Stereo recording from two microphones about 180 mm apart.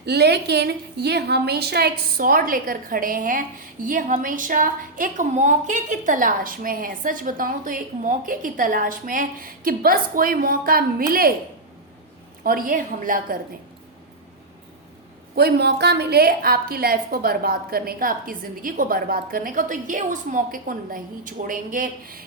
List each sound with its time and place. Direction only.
0.0 s a woman's voice: 65° right (ahead or behind)
12.4 s a woman's voice: 50° right (ahead or behind)
15.4 s a woman's voice: 60° right (ahead or behind)